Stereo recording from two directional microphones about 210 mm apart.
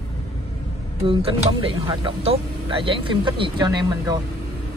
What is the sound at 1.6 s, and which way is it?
Speech, 25° right (ahead or behind).